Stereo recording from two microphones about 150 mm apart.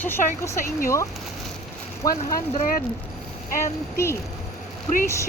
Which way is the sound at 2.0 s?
25° left (ahead or behind).